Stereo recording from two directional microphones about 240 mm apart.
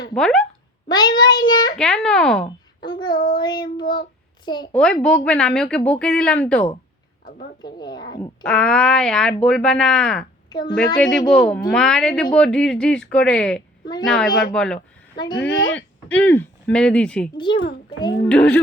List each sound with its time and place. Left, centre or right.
0.1 s speech: centre
0.9 s speech: centre
1.8 s speech: centre
2.8 s child singing: centre
4.4 s speech: centre
4.7 s speech: centre
7.6 s speech: centre
8.4 s speech: centre
10.5 s child singing: centre
11.3 s speech: centre
15.4 s speech: left
16.0 s speech: centre
17.3 s child singing: centre
18.3 s speech: centre